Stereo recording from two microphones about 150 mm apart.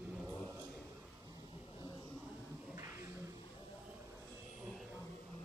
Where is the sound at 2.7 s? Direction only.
20° right (ahead or behind).